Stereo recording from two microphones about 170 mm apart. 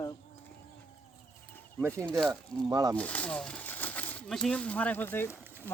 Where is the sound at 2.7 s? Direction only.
20° right (ahead or behind).